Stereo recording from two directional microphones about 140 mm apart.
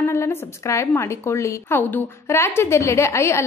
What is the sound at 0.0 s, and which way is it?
A woman's voice, 20° left (ahead or behind).